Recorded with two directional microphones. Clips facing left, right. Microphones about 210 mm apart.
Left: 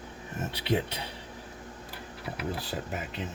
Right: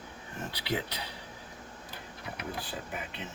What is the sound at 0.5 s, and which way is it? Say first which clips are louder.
Speech: left 5 dB; 25° left (ahead or behind).